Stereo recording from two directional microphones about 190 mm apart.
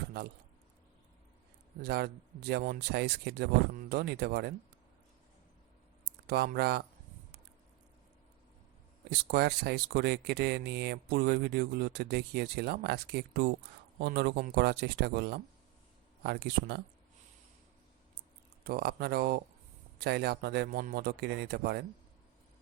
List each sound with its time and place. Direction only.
1.8 s speech: 55° right (ahead or behind)
6.2 s speech: 55° right (ahead or behind)
9.3 s speech: 60° right (ahead or behind)
18.6 s speech: 55° right (ahead or behind)